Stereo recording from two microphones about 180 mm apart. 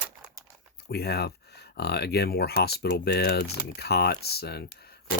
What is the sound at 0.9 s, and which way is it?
Speech, 60° left (ahead or behind).